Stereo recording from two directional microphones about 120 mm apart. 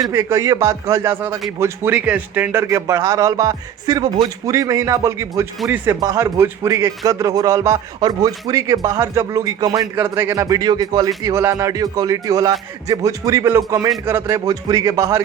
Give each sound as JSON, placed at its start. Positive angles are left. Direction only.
{"t": 0.1, "sound": "a man's voice", "side_deg": -25}